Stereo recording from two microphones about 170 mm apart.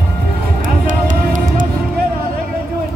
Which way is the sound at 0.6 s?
50° right (ahead or behind).